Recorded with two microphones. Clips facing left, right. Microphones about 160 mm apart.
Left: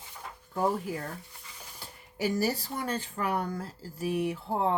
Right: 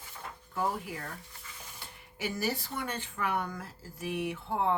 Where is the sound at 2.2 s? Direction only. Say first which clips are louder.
Left 5 dB; 40° left (ahead or behind).